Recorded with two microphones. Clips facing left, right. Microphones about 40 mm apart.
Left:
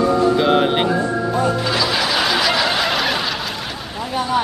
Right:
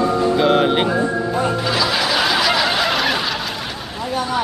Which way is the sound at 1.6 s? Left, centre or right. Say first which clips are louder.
Even; centre.